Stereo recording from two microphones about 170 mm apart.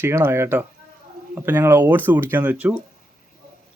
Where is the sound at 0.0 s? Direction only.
15° right (ahead or behind).